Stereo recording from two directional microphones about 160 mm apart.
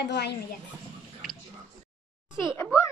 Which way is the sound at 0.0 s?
90° left.